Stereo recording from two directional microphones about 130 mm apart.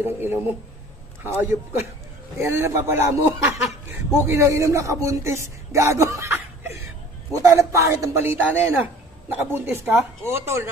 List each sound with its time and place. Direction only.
0.0 s a man's voice: 15° right (ahead or behind)
7.3 s a man's voice: 25° right (ahead or behind)